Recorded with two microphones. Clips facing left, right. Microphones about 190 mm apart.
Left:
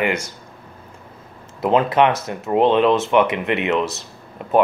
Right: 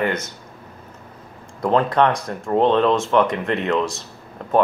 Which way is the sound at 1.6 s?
5° left (ahead or behind).